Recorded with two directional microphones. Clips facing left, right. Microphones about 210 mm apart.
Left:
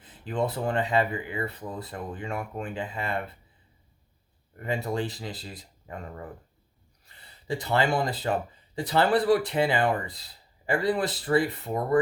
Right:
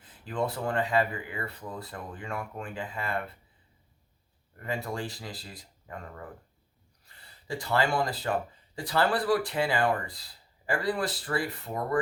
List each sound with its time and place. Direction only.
0.0 s speech: 20° left (ahead or behind)
4.5 s speech: 20° left (ahead or behind)